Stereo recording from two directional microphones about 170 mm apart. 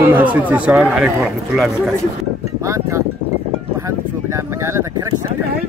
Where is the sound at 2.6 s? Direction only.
20° right (ahead or behind).